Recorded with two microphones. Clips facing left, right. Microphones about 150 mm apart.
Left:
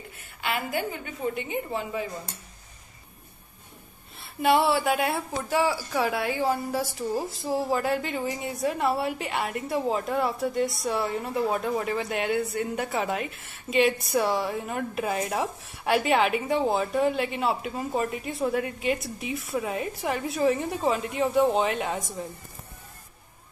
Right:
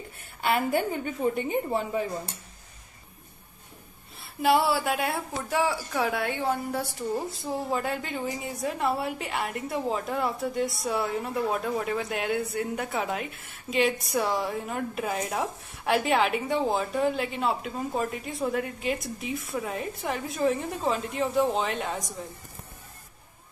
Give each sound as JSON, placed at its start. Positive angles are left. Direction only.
{"t": 0.4, "sound": "a woman's voice", "side_deg": -35}
{"t": 4.2, "sound": "a woman's voice", "side_deg": 0}